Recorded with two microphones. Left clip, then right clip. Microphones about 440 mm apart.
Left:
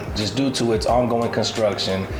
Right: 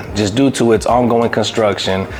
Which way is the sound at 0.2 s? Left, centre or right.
Right.